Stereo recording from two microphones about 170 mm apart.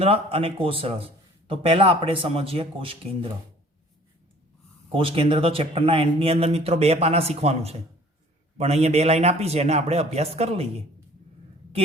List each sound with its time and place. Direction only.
0.0 s a man's voice: 35° right (ahead or behind)
4.9 s a man's voice: 30° right (ahead or behind)